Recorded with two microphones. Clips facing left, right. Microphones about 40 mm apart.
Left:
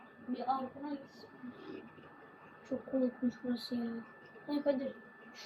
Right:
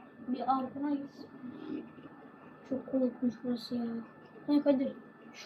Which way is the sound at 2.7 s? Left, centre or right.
Centre.